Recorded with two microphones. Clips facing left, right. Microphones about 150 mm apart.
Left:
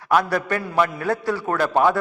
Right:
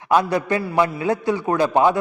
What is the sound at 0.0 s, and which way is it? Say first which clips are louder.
A man's voice: right 2 dB; 20° right (ahead or behind).